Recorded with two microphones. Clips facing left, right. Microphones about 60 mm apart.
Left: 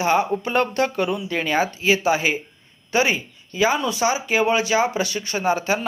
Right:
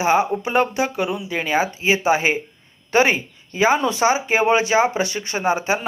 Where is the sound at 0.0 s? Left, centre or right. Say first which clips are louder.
Right 2 dB; centre.